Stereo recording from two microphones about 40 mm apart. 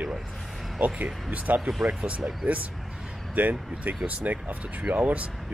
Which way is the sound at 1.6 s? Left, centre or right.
Centre.